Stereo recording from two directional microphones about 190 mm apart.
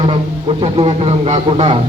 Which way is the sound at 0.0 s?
30° right (ahead or behind).